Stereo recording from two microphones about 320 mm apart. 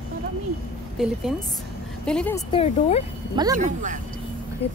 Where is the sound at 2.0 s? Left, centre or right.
Centre.